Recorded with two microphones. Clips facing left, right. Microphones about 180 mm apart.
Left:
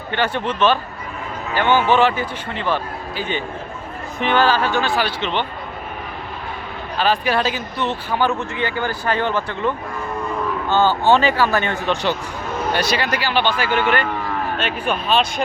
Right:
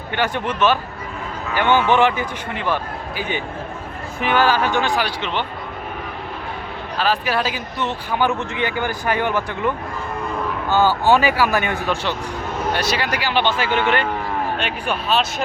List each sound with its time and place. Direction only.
0.1 s speech: 10° right (ahead or behind)
7.0 s speech: 5° right (ahead or behind)
10.7 s speech: 20° left (ahead or behind)
11.1 s speech: 10° right (ahead or behind)
14.6 s speech: 5° right (ahead or behind)